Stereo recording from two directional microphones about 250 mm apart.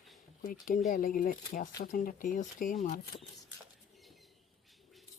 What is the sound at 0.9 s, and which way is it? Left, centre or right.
Speech, left.